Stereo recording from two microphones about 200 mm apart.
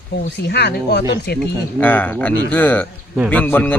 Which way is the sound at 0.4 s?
55° left (ahead or behind).